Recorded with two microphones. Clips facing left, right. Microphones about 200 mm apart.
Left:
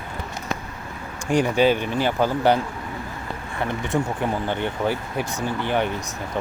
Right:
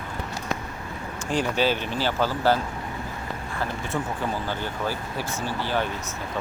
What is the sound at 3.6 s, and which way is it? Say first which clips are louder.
Speech: left 6 dB; 20° left (ahead or behind).